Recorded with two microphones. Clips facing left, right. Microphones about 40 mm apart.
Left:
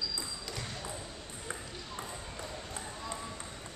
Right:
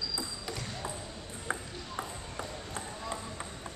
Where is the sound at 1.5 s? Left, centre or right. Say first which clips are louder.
Right 6 dB; centre.